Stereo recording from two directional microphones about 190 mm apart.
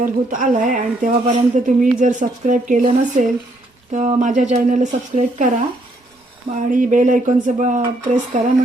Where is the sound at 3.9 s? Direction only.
35° right (ahead or behind).